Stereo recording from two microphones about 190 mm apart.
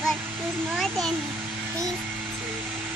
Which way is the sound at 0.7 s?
Centre (ahead or behind).